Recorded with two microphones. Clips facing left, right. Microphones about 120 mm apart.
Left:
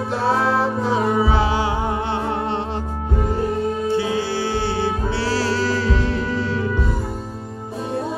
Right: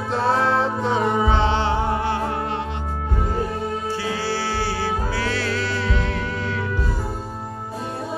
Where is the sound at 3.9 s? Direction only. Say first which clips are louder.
Left 4 dB; 20° left (ahead or behind).